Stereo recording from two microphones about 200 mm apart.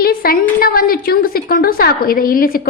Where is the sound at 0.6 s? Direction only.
45° left (ahead or behind).